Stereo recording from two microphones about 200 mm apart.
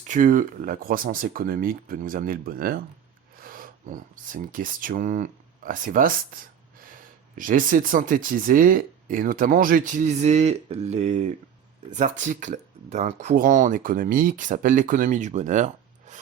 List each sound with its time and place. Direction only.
0.1 s speech: 40° right (ahead or behind)